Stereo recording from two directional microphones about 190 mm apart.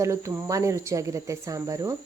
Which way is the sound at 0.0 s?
15° right (ahead or behind).